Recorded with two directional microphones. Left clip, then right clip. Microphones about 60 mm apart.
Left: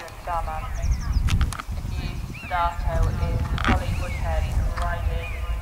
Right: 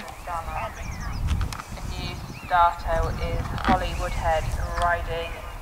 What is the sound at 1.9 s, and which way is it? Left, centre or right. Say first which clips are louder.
Clip-clop: right 3 dB; right.